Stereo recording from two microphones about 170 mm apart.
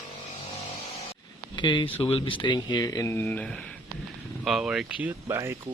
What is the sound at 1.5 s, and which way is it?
Speech, 25° left (ahead or behind).